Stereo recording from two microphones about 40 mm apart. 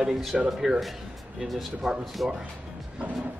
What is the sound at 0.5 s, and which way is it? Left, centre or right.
Speech, centre.